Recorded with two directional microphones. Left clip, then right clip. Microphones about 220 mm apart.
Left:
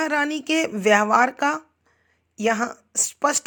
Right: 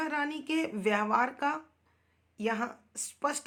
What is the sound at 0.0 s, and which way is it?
Speech, 40° left (ahead or behind).